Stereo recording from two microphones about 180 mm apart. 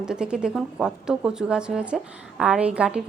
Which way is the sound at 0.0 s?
5° right (ahead or behind).